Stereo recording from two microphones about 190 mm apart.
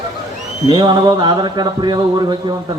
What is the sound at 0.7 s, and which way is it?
Speech, 25° right (ahead or behind).